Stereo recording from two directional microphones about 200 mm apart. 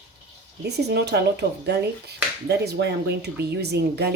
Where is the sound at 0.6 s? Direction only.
55° right (ahead or behind).